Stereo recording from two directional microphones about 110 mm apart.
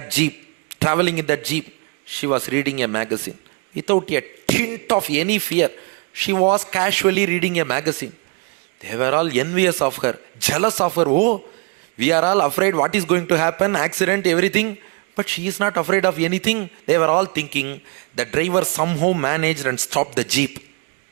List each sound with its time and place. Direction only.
0.0 s a man's voice: 20° right (ahead or behind)